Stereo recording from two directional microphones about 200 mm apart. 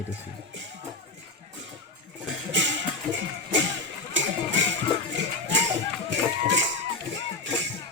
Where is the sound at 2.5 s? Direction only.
65° right (ahead or behind).